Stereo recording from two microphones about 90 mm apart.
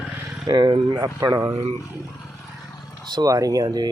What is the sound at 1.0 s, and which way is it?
Speech, 35° right (ahead or behind).